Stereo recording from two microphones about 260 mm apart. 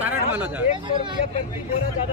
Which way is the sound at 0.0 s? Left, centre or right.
Centre.